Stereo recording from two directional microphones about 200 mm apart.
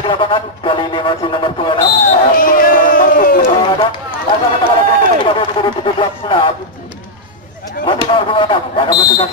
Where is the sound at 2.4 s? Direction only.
45° left (ahead or behind).